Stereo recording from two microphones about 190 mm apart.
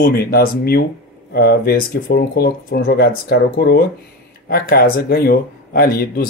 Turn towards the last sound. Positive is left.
turn(degrees=50)  # may be behind; listen again after turning